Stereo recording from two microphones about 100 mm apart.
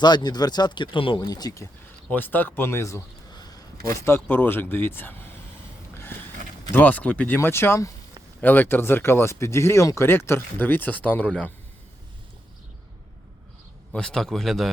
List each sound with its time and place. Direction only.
0.0 s speech: 45° left (ahead or behind)
1.2 s speech: 40° left (ahead or behind)
2.0 s speech: 20° left (ahead or behind)
4.0 s speech: 25° left (ahead or behind)
6.7 s speech: 15° left (ahead or behind)
7.3 s speech: 25° left (ahead or behind)
13.9 s a man's voice: 5° left (ahead or behind)